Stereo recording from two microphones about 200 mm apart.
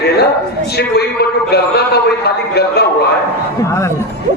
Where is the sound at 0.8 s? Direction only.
55° left (ahead or behind).